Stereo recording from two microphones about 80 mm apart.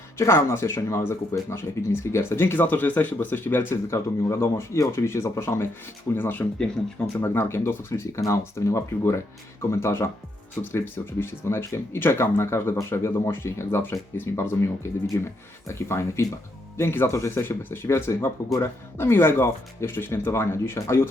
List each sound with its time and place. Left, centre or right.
0.2 s speech: left